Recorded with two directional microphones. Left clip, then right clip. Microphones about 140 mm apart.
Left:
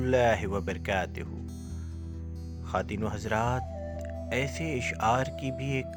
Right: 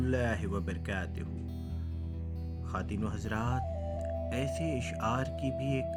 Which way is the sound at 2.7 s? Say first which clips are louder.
Left 7 dB; 45° left (ahead or behind).